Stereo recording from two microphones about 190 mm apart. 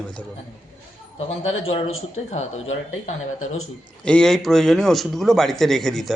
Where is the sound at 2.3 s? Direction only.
35° left (ahead or behind).